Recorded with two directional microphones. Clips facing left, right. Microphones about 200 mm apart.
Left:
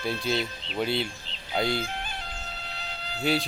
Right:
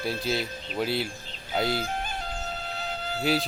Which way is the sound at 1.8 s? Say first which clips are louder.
Right 4 dB; 45° right (ahead or behind).